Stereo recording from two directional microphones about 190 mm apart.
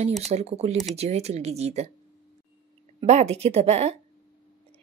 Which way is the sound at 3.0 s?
35° right (ahead or behind).